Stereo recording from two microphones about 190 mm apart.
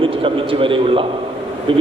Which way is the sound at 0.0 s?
25° right (ahead or behind).